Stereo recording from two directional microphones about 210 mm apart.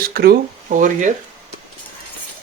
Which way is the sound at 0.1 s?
45° right (ahead or behind).